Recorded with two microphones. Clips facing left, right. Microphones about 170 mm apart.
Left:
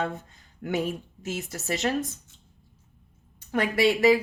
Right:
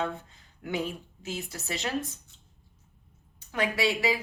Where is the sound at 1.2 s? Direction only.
45° left (ahead or behind).